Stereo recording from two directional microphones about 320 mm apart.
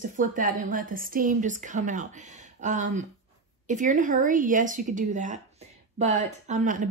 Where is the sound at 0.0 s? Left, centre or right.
Right.